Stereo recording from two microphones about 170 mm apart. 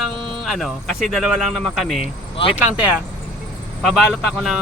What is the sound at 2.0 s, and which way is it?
Speech, 30° left (ahead or behind).